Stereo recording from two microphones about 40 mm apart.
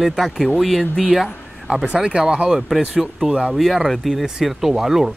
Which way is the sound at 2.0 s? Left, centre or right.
Right.